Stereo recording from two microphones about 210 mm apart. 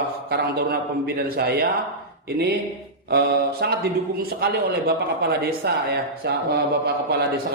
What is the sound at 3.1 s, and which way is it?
A man's voice, 50° right (ahead or behind).